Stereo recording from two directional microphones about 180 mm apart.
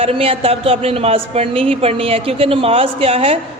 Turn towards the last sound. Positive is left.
turn(degrees=-35)  # may be behind; listen again after turning